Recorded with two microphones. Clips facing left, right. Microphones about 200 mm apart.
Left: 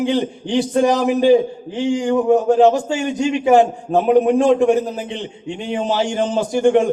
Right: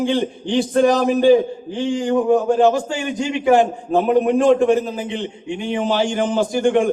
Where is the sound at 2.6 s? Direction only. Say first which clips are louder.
Left 2 dB; 25° left (ahead or behind).